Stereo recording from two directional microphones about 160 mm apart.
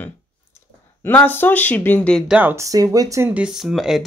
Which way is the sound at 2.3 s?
10° right (ahead or behind).